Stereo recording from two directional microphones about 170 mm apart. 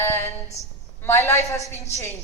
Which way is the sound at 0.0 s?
15° left (ahead or behind).